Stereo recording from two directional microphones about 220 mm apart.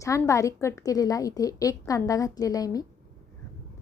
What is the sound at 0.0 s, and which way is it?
A woman's voice, 15° left (ahead or behind).